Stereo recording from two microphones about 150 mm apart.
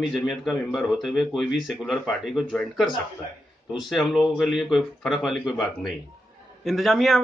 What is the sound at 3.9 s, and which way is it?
Speech, centre (ahead or behind).